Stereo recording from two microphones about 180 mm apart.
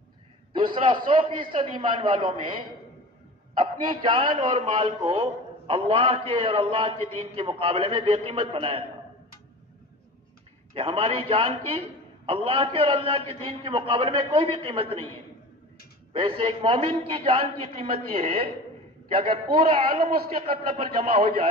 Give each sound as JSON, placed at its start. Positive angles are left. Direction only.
{"t": 1.1, "sound": "a man's voice", "side_deg": -30}
{"t": 3.9, "sound": "a man's voice", "side_deg": -30}
{"t": 10.7, "sound": "a man's voice", "side_deg": -30}
{"t": 16.1, "sound": "a man's voice", "side_deg": -30}